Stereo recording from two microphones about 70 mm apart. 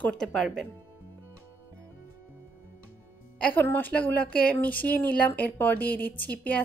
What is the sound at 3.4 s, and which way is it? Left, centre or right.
A woman's voice, centre.